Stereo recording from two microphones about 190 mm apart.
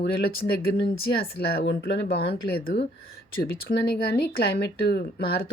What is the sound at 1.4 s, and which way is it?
Speech, 55° left (ahead or behind).